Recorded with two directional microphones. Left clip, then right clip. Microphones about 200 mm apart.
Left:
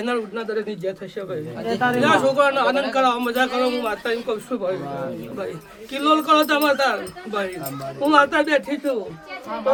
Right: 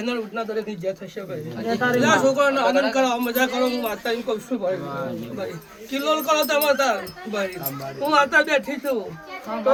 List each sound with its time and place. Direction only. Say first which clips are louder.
0.0 s a man's voice: left 2 dB; 5° left (ahead or behind)
5.9 s a man's voice: left 4 dB; centre (ahead or behind)